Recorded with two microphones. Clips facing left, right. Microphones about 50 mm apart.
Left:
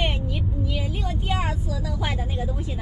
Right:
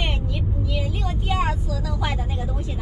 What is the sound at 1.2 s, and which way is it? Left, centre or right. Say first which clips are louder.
Speech: right 4 dB; centre.